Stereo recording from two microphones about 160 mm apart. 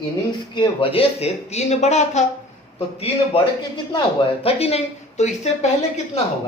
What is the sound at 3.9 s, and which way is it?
Speech, 35° left (ahead or behind).